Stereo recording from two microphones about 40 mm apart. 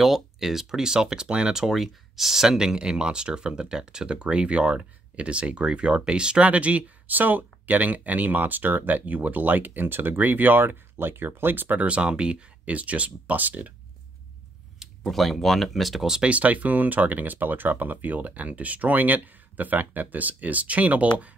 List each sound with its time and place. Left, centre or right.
0.0 s speech: centre; by 6.9 s right
7.1 s speech: right
11.8 s speech: right
15.0 s speech: centre
16.2 s speech: right